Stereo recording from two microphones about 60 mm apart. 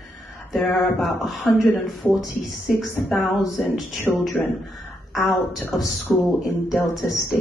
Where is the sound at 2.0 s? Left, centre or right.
Left.